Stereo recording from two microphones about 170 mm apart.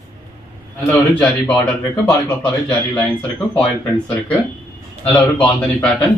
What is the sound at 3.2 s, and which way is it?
Speech, 35° left (ahead or behind).